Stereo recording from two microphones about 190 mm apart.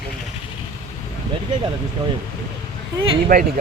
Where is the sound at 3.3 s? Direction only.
50° right (ahead or behind).